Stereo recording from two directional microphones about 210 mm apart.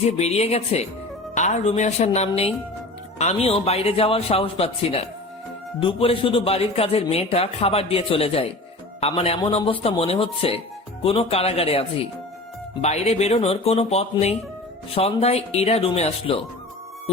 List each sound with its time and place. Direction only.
0.0 s a man's voice: 30° left (ahead or behind)